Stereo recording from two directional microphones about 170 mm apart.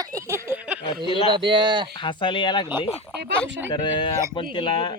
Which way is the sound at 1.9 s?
30° left (ahead or behind).